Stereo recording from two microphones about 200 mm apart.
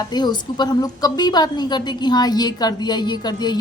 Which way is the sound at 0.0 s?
20° left (ahead or behind).